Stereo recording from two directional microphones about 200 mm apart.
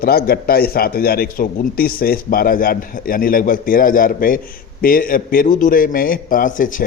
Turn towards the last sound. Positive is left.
turn(degrees=40)  # may be behind; listen again after turning